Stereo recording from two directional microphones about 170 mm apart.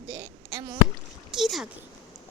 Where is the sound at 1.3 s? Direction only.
Centre (ahead or behind).